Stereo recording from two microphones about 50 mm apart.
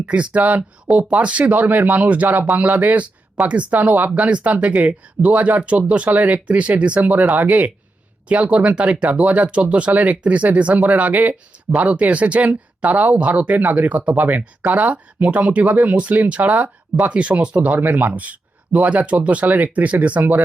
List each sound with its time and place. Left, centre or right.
0.0 s speech: right
2.2 s speech: right
8.3 s speech: right
18.1 s speech: right